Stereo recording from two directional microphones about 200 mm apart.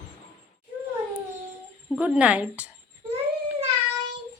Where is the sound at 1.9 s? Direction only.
5° right (ahead or behind).